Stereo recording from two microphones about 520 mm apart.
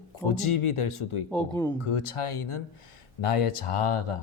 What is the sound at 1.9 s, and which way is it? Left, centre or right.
Speech, left.